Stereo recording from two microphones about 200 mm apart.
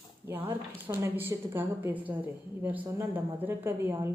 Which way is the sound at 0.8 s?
10° right (ahead or behind).